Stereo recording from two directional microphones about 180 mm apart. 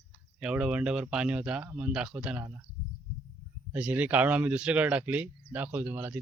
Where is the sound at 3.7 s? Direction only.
10° right (ahead or behind).